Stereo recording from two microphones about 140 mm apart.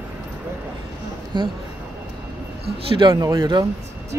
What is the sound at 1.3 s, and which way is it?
Speech, 35° right (ahead or behind).